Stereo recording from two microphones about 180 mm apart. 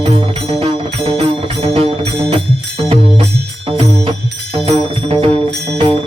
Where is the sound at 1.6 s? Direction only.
30° right (ahead or behind).